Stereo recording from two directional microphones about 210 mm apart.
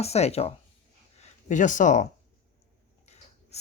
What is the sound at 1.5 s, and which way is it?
Speech, 35° left (ahead or behind).